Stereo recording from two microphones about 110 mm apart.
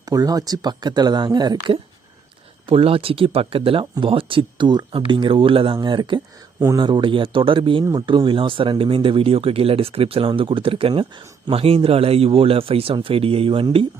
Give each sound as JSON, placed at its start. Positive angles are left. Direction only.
{"t": 0.0, "sound": "speech", "side_deg": -35}
{"t": 2.6, "sound": "speech", "side_deg": -55}